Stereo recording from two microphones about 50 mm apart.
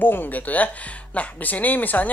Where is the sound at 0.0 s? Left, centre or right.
Left.